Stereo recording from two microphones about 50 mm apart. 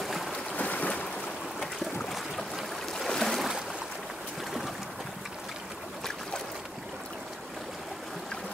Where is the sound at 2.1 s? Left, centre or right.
Centre.